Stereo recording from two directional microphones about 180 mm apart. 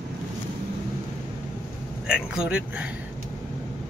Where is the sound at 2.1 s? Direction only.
5° right (ahead or behind).